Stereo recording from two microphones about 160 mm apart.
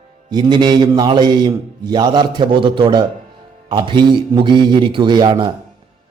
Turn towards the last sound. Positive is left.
turn(degrees=-25)  # may be behind; listen again after turning